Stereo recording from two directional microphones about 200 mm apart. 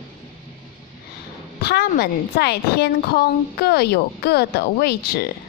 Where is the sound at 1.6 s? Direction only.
55° left (ahead or behind).